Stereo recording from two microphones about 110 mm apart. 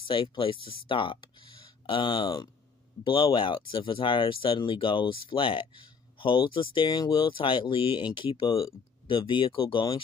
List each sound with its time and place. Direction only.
0.0 s speech: 50° left (ahead or behind)